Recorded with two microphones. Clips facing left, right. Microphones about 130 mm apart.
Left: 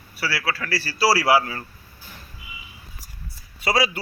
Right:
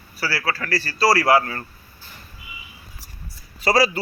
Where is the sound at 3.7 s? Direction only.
Centre (ahead or behind).